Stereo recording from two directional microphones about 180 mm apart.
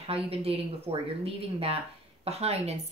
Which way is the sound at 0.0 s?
35° right (ahead or behind).